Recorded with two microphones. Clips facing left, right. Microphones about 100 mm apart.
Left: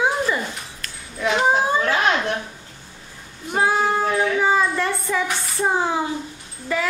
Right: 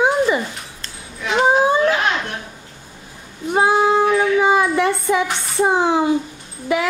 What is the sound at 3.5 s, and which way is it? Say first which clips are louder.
Child singing: right 5 dB; 20° right (ahead or behind).